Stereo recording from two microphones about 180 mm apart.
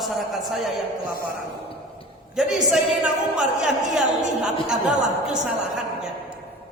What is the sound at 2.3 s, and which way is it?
A man's voice, centre (ahead or behind).